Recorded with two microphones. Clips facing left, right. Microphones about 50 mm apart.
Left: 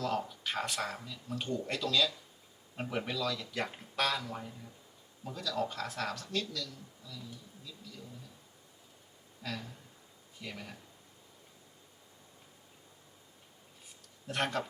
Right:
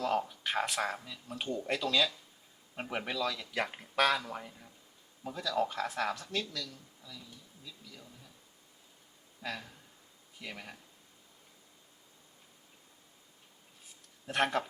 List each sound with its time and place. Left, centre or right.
0.0 s speech: centre
9.4 s a sound: centre
10.4 s speech: centre
14.3 s speech: centre